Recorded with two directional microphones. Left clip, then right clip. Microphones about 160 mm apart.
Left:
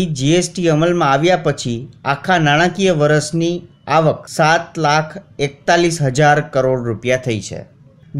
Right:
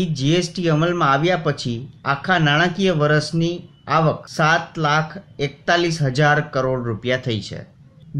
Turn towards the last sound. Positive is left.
turn(degrees=35)  # may be behind; listen again after turning